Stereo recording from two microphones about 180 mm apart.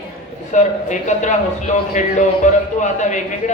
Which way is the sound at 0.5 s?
40° left (ahead or behind).